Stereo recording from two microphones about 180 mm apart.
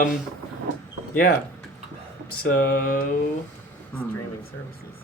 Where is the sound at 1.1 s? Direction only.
50° left (ahead or behind).